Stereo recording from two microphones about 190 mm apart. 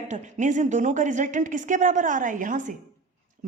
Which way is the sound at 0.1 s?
40° right (ahead or behind).